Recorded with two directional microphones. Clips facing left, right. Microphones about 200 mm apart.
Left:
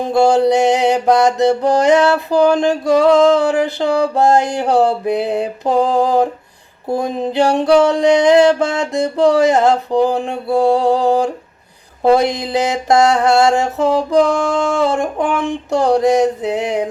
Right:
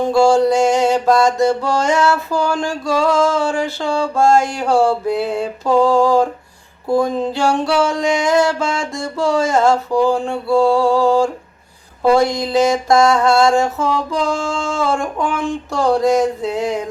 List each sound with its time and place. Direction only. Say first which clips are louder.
0.1 s mantra: left 2 dB; 20° left (ahead or behind)
7.9 s music: left 6 dB; 65° left (ahead or behind)
8.4 s mantra: left 5 dB; 20° left (ahead or behind)
13.7 s music: left 6 dB; 65° left (ahead or behind)
14.8 s mantra: left 2 dB; 20° left (ahead or behind)